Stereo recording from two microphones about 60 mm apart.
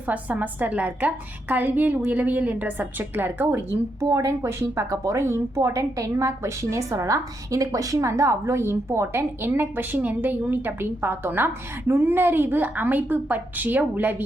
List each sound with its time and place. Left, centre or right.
0.1 s a woman's voice: right
4.7 s speech: right
5.1 s speech: right
5.5 s a woman's voice: right